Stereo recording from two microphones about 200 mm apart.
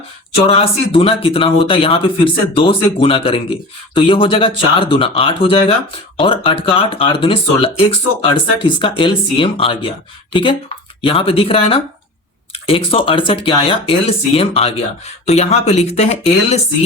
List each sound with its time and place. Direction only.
0.3 s speech: 30° left (ahead or behind)
11.0 s speech: 25° left (ahead or behind)